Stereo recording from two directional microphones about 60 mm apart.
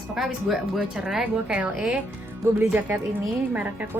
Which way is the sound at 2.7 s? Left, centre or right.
Right.